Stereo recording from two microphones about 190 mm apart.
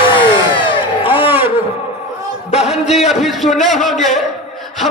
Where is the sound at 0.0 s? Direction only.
25° left (ahead or behind).